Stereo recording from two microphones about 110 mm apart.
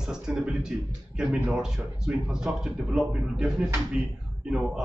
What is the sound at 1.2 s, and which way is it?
Speech, 5° right (ahead or behind).